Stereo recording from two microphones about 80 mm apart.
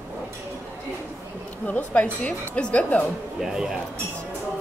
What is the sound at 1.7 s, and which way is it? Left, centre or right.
A woman's voice, centre.